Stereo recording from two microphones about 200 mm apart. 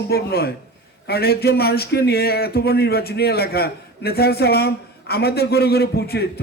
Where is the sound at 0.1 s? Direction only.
50° left (ahead or behind).